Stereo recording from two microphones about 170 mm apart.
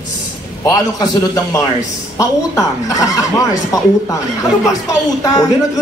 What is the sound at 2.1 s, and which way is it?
A man's voice, 20° left (ahead or behind).